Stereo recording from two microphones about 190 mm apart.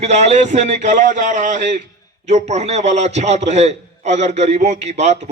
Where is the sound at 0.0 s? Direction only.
35° right (ahead or behind).